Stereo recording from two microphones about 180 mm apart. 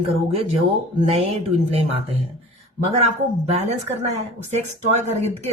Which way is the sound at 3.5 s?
35° right (ahead or behind).